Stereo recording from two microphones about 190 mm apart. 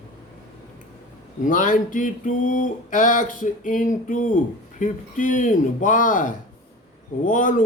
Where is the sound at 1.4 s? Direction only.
45° left (ahead or behind).